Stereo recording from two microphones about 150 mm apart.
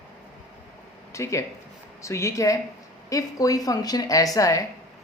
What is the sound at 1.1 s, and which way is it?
Speech, 20° left (ahead or behind).